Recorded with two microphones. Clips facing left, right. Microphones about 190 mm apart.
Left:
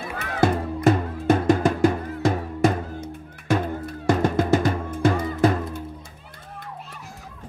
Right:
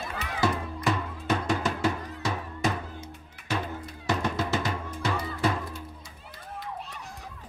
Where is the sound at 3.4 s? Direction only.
50° left (ahead or behind).